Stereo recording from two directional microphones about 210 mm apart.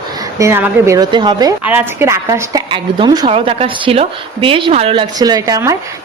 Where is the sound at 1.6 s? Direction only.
10° right (ahead or behind).